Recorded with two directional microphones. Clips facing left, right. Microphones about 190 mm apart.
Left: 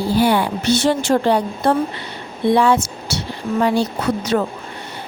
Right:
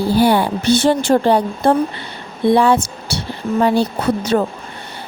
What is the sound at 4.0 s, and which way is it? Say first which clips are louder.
Speech: right 2 dB; 30° right (ahead or behind).